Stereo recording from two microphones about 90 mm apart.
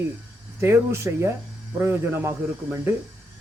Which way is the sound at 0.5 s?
30° right (ahead or behind).